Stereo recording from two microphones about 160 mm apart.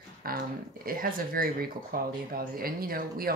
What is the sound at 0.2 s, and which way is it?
Speech, 65° right (ahead or behind).